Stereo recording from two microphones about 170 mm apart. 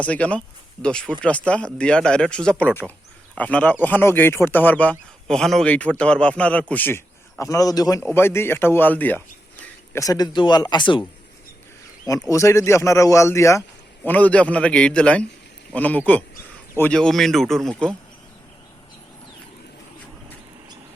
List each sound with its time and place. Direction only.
0.0 s speech: 5° left (ahead or behind); by 11.0 s 30° left (ahead or behind)
12.3 s speech: 15° left (ahead or behind)